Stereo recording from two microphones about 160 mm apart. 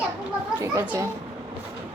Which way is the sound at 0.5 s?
10° right (ahead or behind).